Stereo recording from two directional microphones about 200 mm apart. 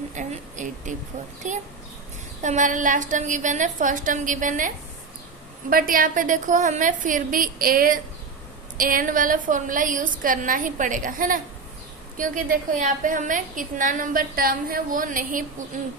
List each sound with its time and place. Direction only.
0.1 s a sound: 40° right (ahead or behind)
2.4 s a woman's voice: 40° right (ahead or behind)
5.7 s a woman's voice: 45° right (ahead or behind)